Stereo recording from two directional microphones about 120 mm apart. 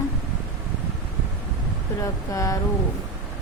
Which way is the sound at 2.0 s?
30° left (ahead or behind).